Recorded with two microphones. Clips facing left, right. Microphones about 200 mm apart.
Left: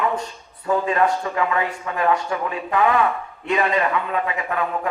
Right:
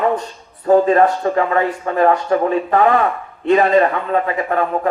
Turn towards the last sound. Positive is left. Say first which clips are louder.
# right 6 dB
turn(degrees=-40)  # may be behind; listen again after turning